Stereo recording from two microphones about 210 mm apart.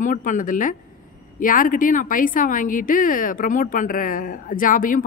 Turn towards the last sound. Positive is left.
turn(degrees=40)  # may be behind; listen again after turning